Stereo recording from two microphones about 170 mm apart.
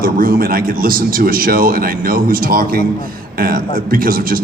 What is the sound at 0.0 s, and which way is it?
A man's voice, 60° right (ahead or behind).